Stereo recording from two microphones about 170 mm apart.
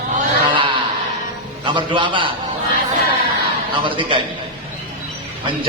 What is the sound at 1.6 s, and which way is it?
Speech, 30° right (ahead or behind).